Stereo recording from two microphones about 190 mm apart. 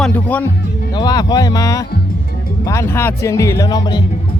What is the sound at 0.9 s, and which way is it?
Speech, 20° left (ahead or behind).